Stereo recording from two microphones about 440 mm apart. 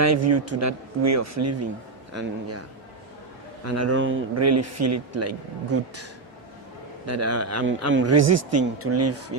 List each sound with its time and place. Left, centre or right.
0.0 s speech: right
3.7 s speech: right
7.0 s speech: right